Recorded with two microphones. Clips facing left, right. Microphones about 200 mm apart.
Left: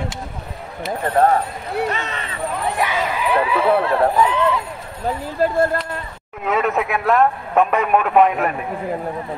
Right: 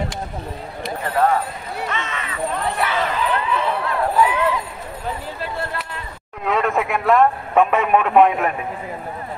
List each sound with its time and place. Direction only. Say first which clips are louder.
1.0 s speech: left 3 dB; 45° left (ahead or behind)
2.7 s speech: left 1 dB; 15° left (ahead or behind)
4.2 s speech: left 1 dB; 10° right (ahead or behind)
5.4 s speech: left 15 dB; 45° left (ahead or behind)
6.4 s speech: left 1 dB; 5° left (ahead or behind)